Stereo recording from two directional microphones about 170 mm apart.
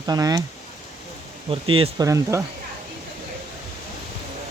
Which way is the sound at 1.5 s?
30° right (ahead or behind).